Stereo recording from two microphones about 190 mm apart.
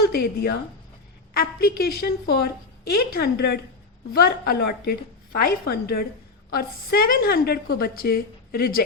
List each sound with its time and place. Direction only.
0.0 s a woman's voice: 55° left (ahead or behind)